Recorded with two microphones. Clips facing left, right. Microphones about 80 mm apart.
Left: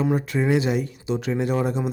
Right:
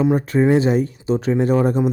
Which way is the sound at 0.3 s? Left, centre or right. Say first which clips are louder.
Right 7 dB; right.